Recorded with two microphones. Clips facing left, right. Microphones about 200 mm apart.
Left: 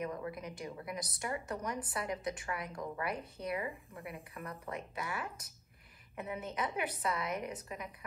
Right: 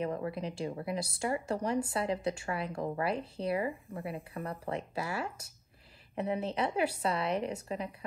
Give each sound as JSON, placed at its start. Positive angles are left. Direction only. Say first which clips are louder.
{"t": 0.0, "sound": "a woman's voice", "louder": "right 5 dB", "side_deg": -30}